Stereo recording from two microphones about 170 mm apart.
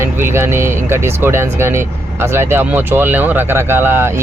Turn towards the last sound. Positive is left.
turn(degrees=-10)  # may be behind; listen again after turning